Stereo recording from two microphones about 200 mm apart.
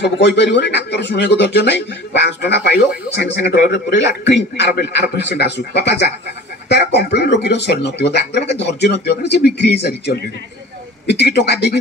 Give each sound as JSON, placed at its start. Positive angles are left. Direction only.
{"t": 0.0, "sound": "speech", "side_deg": 60}